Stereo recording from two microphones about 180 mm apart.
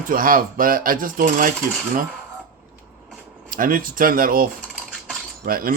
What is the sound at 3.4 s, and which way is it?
A man's voice, 50° right (ahead or behind).